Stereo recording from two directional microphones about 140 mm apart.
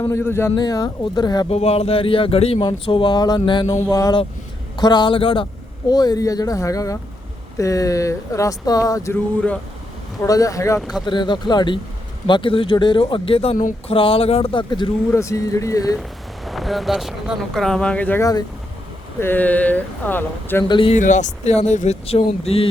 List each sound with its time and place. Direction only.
0.0 s speech: 15° left (ahead or behind)
0.5 s speech: 25° left (ahead or behind)
1.5 s speech: 45° left (ahead or behind)
2.6 s speech: 35° left (ahead or behind)
5.9 s speech: 30° left (ahead or behind)
10.2 s speech: 25° left (ahead or behind)
11.0 s speech: 35° left (ahead or behind)
15.1 s speech: 20° left (ahead or behind)
16.5 s speech: centre (ahead or behind)
18.2 s speech: 25° left (ahead or behind)
19.2 s speech: 15° left (ahead or behind)
20.7 s speech: 35° left (ahead or behind)
20.9 s speech: 60° left (ahead or behind)